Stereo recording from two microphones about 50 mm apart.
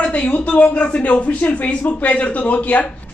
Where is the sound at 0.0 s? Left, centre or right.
Left.